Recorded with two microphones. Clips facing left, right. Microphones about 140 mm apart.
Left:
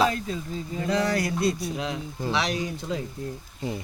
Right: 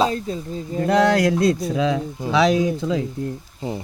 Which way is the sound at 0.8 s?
60° right (ahead or behind).